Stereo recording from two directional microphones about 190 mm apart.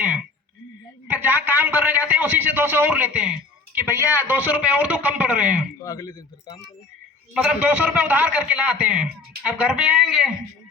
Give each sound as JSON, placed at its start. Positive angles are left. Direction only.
{"t": 1.0, "sound": "a man's voice", "side_deg": -10}
{"t": 5.8, "sound": "speech", "side_deg": 20}
{"t": 7.3, "sound": "a man's voice", "side_deg": -10}